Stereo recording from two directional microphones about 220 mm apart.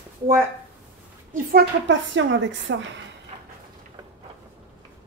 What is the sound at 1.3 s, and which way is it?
A woman's voice, 45° right (ahead or behind).